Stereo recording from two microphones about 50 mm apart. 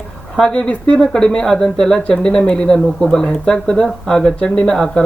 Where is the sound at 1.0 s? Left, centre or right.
Centre.